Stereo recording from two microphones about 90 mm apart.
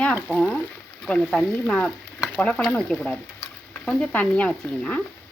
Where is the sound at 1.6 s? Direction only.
15° left (ahead or behind).